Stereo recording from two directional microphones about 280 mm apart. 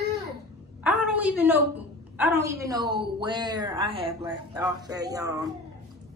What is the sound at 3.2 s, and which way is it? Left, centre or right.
Speech, centre.